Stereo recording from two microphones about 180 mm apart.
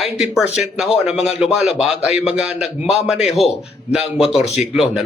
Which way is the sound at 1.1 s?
5° right (ahead or behind).